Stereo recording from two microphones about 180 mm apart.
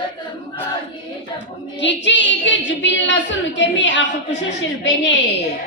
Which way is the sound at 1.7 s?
80° left.